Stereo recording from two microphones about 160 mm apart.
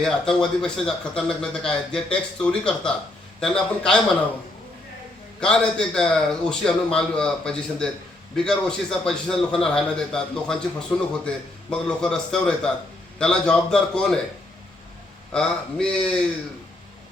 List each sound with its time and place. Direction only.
0.0 s speech: 5° left (ahead or behind)
5.4 s speech: 5° left (ahead or behind)
15.3 s speech: 5° left (ahead or behind)